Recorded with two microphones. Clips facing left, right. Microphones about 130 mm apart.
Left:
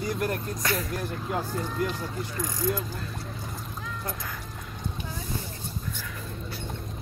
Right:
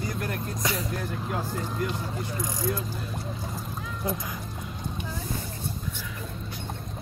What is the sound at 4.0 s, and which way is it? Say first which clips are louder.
Speech: right 7 dB; 15° right (ahead or behind).